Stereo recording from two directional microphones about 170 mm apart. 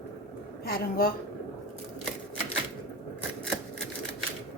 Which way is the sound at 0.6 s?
60° left (ahead or behind).